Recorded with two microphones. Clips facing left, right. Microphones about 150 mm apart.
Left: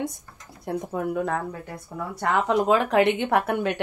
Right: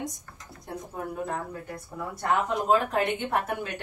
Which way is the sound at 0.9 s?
75° left (ahead or behind).